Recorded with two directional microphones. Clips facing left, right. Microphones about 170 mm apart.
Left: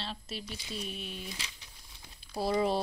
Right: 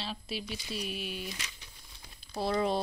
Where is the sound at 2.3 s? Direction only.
5° left (ahead or behind).